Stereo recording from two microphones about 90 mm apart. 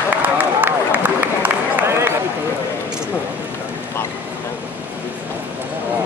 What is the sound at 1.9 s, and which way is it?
Run, 30° right (ahead or behind).